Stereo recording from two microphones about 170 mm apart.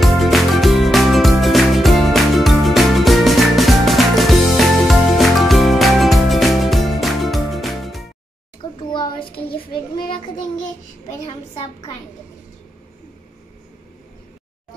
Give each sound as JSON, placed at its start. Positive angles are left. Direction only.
{"t": 0.0, "sound": "music", "side_deg": 0}
{"t": 8.9, "sound": "child singing", "side_deg": 30}
{"t": 11.2, "sound": "a sound", "side_deg": 35}